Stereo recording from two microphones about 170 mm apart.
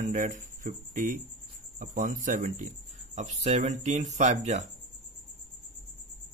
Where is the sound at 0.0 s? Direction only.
50° right (ahead or behind).